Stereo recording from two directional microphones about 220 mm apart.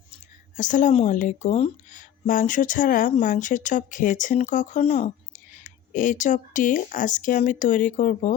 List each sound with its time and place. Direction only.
0.5 s speech: 35° left (ahead or behind)